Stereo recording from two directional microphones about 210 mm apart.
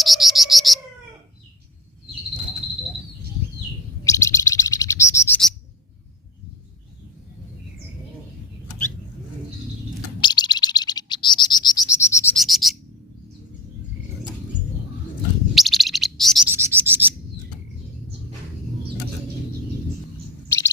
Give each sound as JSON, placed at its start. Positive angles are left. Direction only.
{"t": 0.0, "sound": "a sound", "side_deg": 0}
{"t": 4.0, "sound": "bird", "side_deg": 15}
{"t": 10.2, "sound": "bird", "side_deg": 20}
{"t": 12.4, "sound": "bird", "side_deg": 0}
{"t": 15.5, "sound": "bird", "side_deg": 0}
{"t": 16.6, "sound": "a sound", "side_deg": -10}